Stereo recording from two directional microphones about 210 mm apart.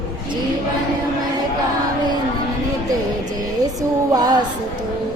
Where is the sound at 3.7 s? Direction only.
15° right (ahead or behind).